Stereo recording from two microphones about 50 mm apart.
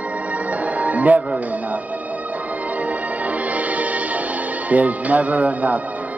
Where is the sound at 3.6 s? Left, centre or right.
Right.